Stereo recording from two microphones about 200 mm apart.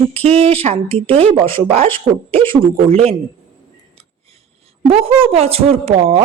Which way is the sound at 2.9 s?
30° right (ahead or behind).